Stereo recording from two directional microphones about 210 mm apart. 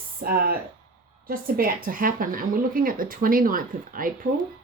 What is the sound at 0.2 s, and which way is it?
A woman's voice, 45° right (ahead or behind).